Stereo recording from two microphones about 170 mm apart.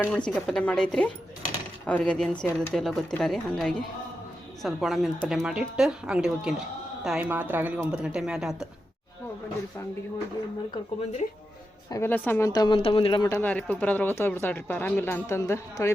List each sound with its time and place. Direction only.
0.0 s speech: 5° left (ahead or behind)
11.9 s speech: 15° left (ahead or behind); by 13.2 s 30° left (ahead or behind)
13.2 s speech: 10° left (ahead or behind)